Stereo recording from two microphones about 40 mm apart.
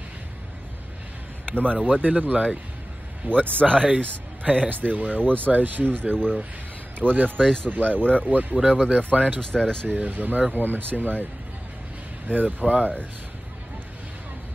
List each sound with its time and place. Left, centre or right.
1.8 s speech: right
3.7 s speech: right
4.0 s speech: right
7.3 s speech: centre
7.7 s speech: right
8.0 s speech: left
8.3 s speech: right
9.4 s speech: left
9.8 s speech: right
12.3 s speech: right